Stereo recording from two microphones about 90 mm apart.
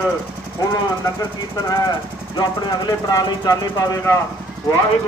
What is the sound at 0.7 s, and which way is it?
Speech, 35° left (ahead or behind).